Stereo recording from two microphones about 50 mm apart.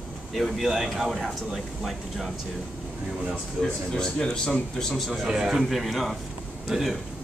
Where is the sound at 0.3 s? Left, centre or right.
Centre.